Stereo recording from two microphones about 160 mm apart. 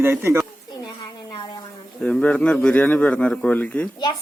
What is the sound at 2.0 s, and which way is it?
A man's voice, 5° left (ahead or behind).